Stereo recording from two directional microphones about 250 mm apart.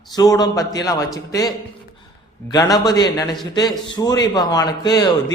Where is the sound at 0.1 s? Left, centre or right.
Centre.